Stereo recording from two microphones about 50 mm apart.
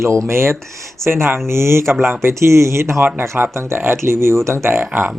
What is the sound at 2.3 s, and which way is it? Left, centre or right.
Speech, right.